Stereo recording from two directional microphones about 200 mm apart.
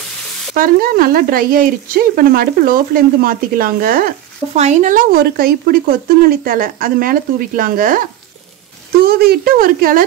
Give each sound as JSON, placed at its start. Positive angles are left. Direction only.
{"t": 0.6, "sound": "speech", "side_deg": -45}
{"t": 4.6, "sound": "speech", "side_deg": -35}
{"t": 9.0, "sound": "speech", "side_deg": -50}